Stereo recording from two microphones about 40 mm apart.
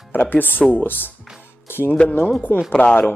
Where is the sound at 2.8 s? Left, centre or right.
Left.